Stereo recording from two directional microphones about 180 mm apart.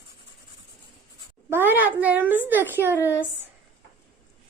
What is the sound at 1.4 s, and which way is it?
A child's voice, 10° right (ahead or behind).